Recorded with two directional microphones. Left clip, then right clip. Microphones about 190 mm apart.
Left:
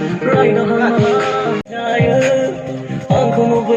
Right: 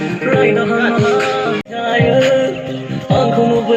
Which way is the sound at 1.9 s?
30° right (ahead or behind).